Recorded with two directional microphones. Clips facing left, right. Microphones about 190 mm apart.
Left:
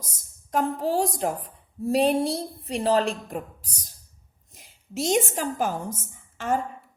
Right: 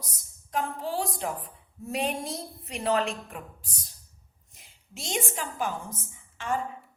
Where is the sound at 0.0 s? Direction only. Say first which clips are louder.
Left 1 dB; 45° left (ahead or behind).